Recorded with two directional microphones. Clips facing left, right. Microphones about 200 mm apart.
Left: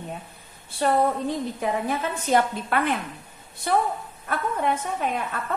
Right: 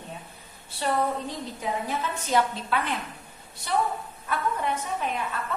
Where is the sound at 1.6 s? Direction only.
55° left (ahead or behind).